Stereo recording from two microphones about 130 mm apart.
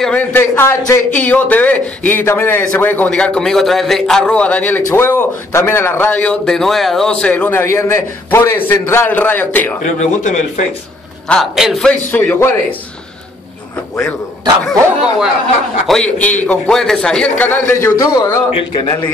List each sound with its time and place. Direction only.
0.0 s a man's voice: 10° left (ahead or behind)
9.9 s speech: 65° left (ahead or behind)
11.2 s speech: centre (ahead or behind)
11.8 s a man's voice: 15° left (ahead or behind)
14.7 s speech: 5° right (ahead or behind)
15.9 s a man's voice: 10° left (ahead or behind)
17.8 s a man's voice: 25° left (ahead or behind)